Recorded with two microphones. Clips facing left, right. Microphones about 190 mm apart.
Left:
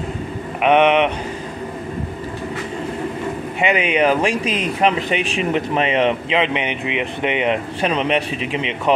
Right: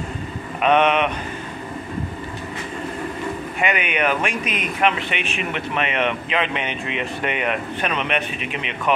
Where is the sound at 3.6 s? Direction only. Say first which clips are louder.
Left 5 dB; 30° left (ahead or behind).